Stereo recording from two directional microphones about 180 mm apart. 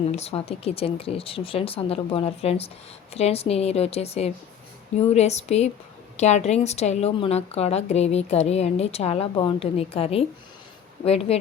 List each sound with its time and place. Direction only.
0.1 s a woman's voice: 35° left (ahead or behind)